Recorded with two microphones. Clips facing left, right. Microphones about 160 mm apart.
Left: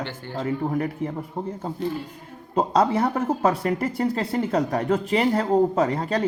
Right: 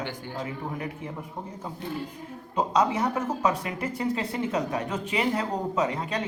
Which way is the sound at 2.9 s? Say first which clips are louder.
Left 5 dB; 55° left (ahead or behind).